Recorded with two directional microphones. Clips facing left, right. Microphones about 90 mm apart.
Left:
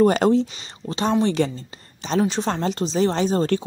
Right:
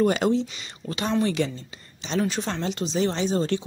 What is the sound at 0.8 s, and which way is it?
A woman's voice, 30° left (ahead or behind).